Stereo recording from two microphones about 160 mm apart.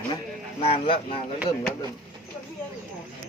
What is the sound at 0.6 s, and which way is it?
Speech, 35° left (ahead or behind).